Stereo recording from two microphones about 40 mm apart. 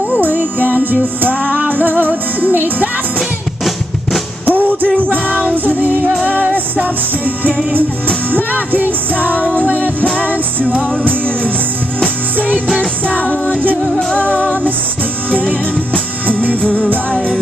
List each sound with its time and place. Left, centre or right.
0.1 s music: right
3.2 s drum: centre
4.5 s music: right
4.8 s music: left
5.4 s music: right
8.5 s music: right
9.4 s music: left
9.7 s music: right
10.8 s music: left
13.1 s music: left
15.9 s music: left